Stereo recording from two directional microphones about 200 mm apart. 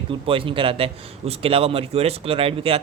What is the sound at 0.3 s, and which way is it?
A man's voice, 25° right (ahead or behind).